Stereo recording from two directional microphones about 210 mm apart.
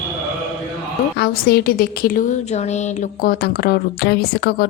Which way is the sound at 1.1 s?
50° left (ahead or behind).